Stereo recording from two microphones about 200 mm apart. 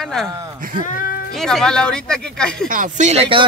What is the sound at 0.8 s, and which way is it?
Speech, 45° left (ahead or behind).